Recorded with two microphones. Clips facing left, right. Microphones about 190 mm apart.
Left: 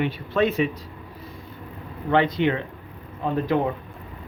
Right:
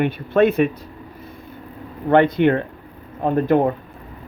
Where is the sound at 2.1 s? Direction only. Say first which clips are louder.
Right 6 dB; 55° right (ahead or behind).